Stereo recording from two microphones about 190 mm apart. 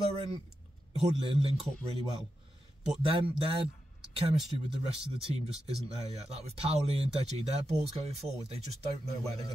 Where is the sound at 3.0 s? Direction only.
30° right (ahead or behind).